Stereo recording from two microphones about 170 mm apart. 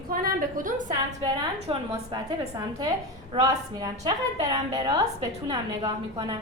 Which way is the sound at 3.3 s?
30° right (ahead or behind).